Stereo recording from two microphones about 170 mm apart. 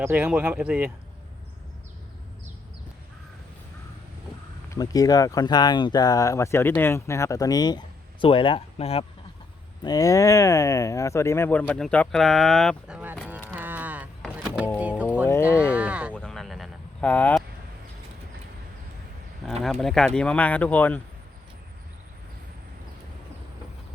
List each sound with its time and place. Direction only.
0.0 s speech: 10° right (ahead or behind)
4.7 s speech: 20° left (ahead or behind)
9.8 s speech: 20° left (ahead or behind); by 13.0 s centre (ahead or behind)
13.1 s a sound: 5° right (ahead or behind)
14.2 s vehicle: 5° right (ahead or behind)
14.8 s music: 10° right (ahead or behind)
15.4 s a sound: 10° right (ahead or behind)
16.1 s a sound: 5° left (ahead or behind)
19.8 s speech: 5° left (ahead or behind)